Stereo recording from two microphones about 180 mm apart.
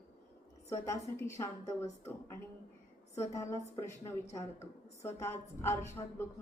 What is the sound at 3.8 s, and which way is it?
A woman's voice, 15° left (ahead or behind).